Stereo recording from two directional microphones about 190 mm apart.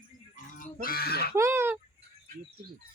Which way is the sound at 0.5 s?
50° left (ahead or behind).